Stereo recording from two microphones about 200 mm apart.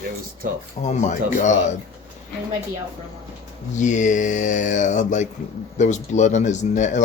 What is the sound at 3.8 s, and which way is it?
Speech, 40° left (ahead or behind).